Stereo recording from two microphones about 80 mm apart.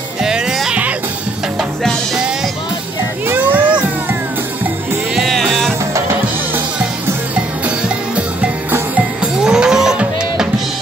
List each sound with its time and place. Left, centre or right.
0.2 s music: centre
3.3 s music: right
5.1 s music: centre
5.9 s music: right
8.9 s music: centre